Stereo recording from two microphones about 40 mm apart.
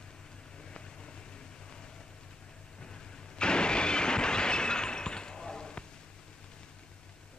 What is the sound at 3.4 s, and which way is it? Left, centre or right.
Shatter, left.